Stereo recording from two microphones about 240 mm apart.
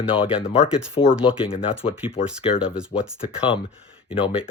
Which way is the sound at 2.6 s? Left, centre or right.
Centre.